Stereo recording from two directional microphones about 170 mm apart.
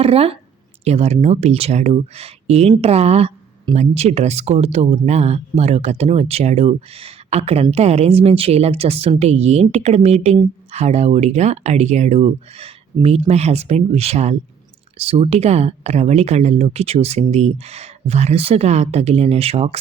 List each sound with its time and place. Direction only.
0.0 s speech: 35° right (ahead or behind)